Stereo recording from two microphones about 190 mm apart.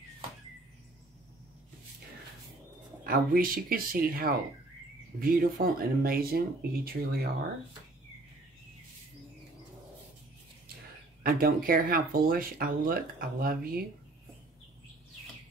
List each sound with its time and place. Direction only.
3.0 s speech: 50° right (ahead or behind)
11.2 s speech: 50° right (ahead or behind)